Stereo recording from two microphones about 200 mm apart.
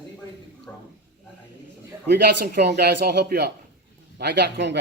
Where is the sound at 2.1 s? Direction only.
55° right (ahead or behind).